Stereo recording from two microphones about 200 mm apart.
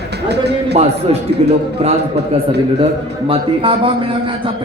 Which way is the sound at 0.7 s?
30° right (ahead or behind).